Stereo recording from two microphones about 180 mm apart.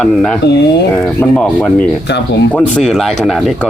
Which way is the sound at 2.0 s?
70° left (ahead or behind).